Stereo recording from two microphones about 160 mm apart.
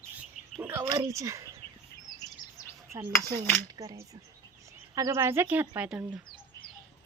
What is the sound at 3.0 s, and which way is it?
Speech, 25° right (ahead or behind).